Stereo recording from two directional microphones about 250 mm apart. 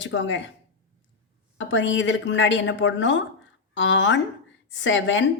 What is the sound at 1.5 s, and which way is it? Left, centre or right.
A woman's voice, left.